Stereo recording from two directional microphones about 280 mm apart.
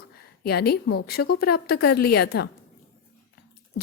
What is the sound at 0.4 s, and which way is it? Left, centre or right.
A woman's voice, left.